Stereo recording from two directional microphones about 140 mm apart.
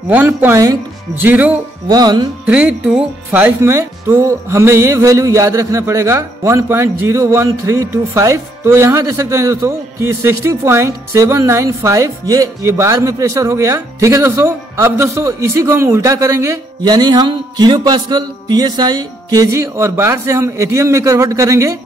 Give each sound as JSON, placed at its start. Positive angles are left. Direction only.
{"t": 0.1, "sound": "speech", "side_deg": -15}
{"t": 1.9, "sound": "speech", "side_deg": -30}
{"t": 2.4, "sound": "speech", "side_deg": -10}
{"t": 16.8, "sound": "speech", "side_deg": -30}